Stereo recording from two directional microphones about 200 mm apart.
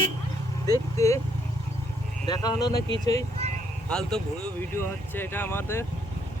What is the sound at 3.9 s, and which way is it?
Speech, 5° left (ahead or behind).